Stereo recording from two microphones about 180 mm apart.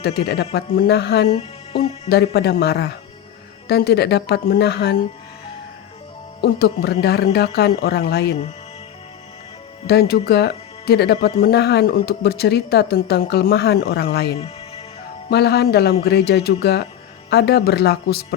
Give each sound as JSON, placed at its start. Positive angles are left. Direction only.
{"t": 0.0, "sound": "speech", "side_deg": 65}
{"t": 1.3, "sound": "music", "side_deg": 35}
{"t": 2.0, "sound": "speech", "side_deg": 65}
{"t": 7.0, "sound": "speech", "side_deg": 65}
{"t": 9.8, "sound": "speech", "side_deg": 60}